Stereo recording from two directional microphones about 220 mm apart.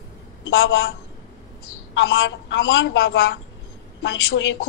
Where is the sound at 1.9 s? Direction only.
50° left (ahead or behind).